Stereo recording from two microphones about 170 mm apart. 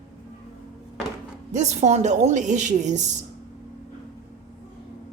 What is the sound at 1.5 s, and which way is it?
A woman's voice, 45° right (ahead or behind).